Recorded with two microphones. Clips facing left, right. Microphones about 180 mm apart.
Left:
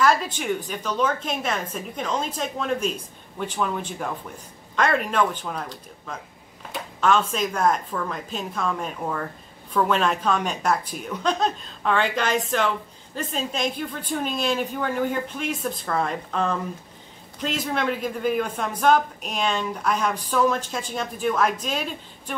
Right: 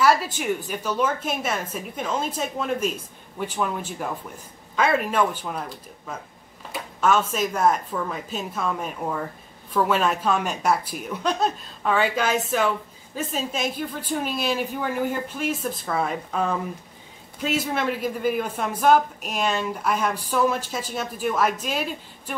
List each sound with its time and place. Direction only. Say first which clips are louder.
0.0 s speech: right 1 dB; 5° right (ahead or behind)